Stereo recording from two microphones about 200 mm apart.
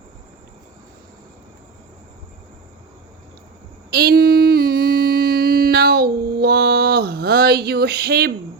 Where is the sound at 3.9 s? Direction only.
50° right (ahead or behind).